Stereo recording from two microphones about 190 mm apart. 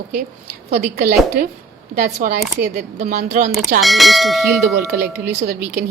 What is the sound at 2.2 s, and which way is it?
A woman's voice, 45° right (ahead or behind).